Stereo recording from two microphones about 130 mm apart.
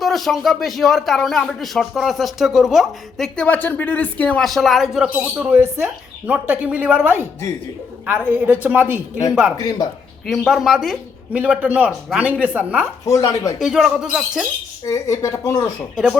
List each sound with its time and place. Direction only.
0.0 s speech: centre (ahead or behind)
9.6 s speech: 30° left (ahead or behind)
10.2 s speech: centre (ahead or behind)
13.1 s speech: 25° left (ahead or behind)
13.6 s speech: 5° right (ahead or behind)
14.8 s speech: 25° left (ahead or behind)